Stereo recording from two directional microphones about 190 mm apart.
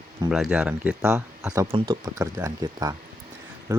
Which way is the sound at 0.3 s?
Centre (ahead or behind).